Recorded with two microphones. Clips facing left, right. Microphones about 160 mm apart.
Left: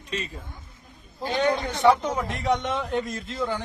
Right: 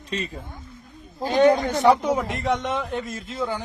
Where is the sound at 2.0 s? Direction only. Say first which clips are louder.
Right 2 dB; 5° right (ahead or behind).